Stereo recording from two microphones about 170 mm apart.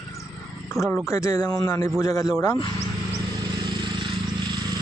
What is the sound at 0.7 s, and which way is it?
Speech, 15° left (ahead or behind).